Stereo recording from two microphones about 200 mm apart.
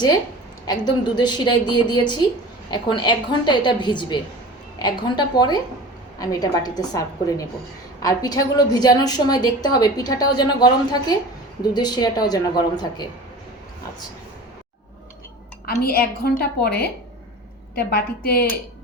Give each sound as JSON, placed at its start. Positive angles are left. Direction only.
{"t": 0.7, "sound": "a woman's voice", "side_deg": 20}
{"t": 15.6, "sound": "a woman's voice", "side_deg": 50}